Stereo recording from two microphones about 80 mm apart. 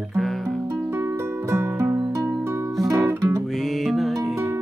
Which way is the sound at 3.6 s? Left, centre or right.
Centre.